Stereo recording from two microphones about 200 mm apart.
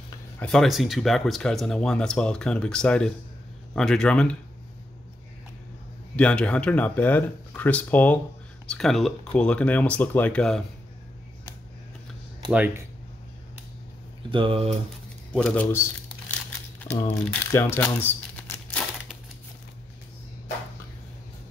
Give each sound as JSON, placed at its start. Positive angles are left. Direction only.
{"t": 0.4, "sound": "speech", "side_deg": 5}
{"t": 6.1, "sound": "speech", "side_deg": 5}
{"t": 12.4, "sound": "speech", "side_deg": -10}
{"t": 14.3, "sound": "speech", "side_deg": -25}
{"t": 15.3, "sound": "speech", "side_deg": 5}
{"t": 17.1, "sound": "speech", "side_deg": 5}
{"t": 17.5, "sound": "crumpling", "side_deg": 10}